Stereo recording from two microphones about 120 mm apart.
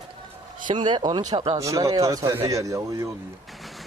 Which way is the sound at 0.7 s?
40° right (ahead or behind).